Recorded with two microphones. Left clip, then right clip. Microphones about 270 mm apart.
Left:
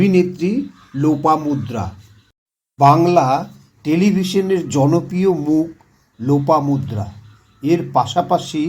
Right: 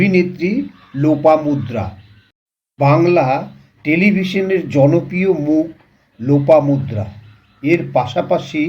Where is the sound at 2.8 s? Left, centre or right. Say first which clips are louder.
Left 1 dB; left.